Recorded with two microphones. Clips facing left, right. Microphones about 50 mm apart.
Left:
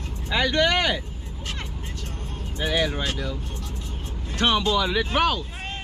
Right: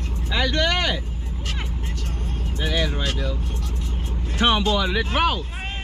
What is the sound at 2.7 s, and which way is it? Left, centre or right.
Speech, centre.